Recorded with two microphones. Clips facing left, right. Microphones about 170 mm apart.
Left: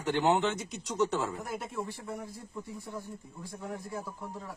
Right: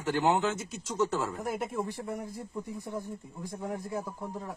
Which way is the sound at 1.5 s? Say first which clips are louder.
Right 4 dB; 45° right (ahead or behind).